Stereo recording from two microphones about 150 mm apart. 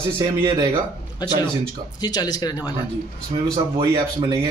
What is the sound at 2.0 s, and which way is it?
Speech, 25° left (ahead or behind).